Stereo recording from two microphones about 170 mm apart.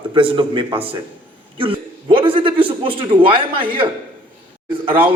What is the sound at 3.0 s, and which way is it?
Speech, 30° right (ahead or behind).